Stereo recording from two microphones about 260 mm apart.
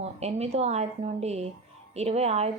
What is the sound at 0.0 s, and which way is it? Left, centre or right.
A woman's voice, right.